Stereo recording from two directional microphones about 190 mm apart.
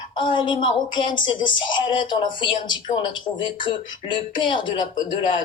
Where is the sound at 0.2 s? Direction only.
25° left (ahead or behind).